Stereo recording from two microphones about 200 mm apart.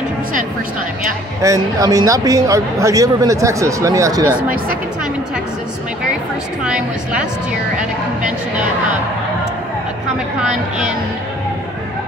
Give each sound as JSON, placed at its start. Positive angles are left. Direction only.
{"t": 1.4, "sound": "speech", "side_deg": -15}
{"t": 6.6, "sound": "a woman's voice", "side_deg": -5}